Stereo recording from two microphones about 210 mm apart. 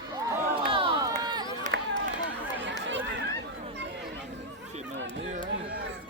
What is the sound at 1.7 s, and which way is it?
Run, 35° right (ahead or behind).